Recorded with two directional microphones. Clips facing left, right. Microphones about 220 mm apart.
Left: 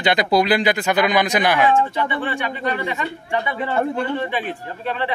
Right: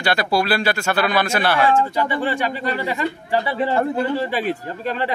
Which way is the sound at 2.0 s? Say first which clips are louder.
Right 2 dB; 40° right (ahead or behind).